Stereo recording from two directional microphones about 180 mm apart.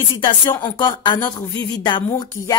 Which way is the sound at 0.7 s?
25° left (ahead or behind).